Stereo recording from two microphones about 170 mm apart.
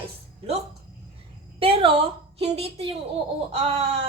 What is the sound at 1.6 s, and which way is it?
A woman's voice, 30° right (ahead or behind).